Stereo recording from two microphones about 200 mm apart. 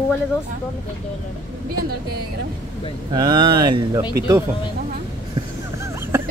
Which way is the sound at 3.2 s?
20° right (ahead or behind).